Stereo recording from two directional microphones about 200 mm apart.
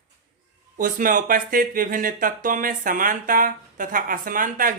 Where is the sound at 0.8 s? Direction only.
40° right (ahead or behind).